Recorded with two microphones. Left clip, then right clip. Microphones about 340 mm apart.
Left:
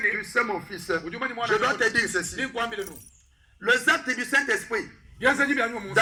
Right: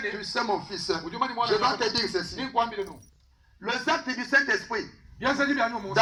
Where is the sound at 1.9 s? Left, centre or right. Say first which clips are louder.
Left 3 dB; right.